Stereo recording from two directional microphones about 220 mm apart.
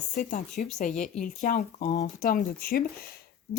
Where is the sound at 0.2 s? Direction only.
35° left (ahead or behind).